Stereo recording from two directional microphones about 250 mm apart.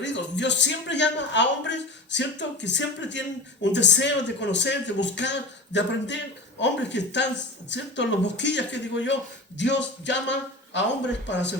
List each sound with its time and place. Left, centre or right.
0.0 s speech: left